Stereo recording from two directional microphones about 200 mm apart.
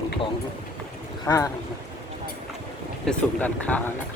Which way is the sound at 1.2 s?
15° left (ahead or behind).